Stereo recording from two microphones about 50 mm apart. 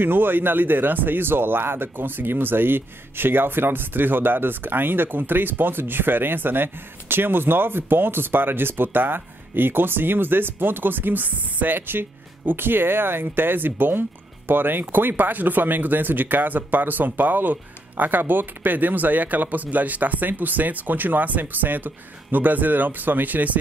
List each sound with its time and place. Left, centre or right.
0.0 s speech: right